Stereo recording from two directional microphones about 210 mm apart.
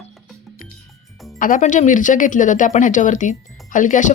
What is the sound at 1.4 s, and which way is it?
Speech, 40° left (ahead or behind).